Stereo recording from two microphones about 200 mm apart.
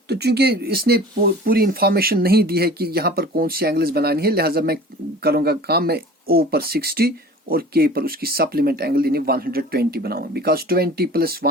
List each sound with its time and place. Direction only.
0.1 s speech: 55° right (ahead or behind)